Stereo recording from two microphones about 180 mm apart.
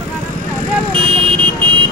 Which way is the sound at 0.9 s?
30° right (ahead or behind).